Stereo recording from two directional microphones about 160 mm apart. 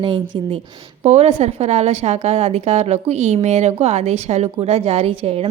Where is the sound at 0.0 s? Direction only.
30° right (ahead or behind).